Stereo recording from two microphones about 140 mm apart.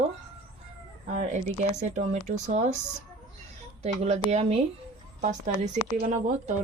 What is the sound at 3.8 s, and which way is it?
Speech, 50° right (ahead or behind).